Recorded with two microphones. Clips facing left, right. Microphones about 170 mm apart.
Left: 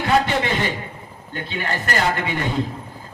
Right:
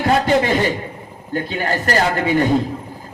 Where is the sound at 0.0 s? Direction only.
40° right (ahead or behind).